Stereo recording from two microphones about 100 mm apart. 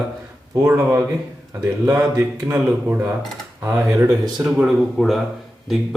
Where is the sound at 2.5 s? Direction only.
25° right (ahead or behind).